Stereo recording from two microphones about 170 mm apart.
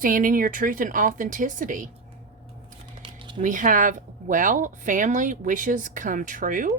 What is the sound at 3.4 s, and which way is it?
A woman's voice, 50° right (ahead or behind).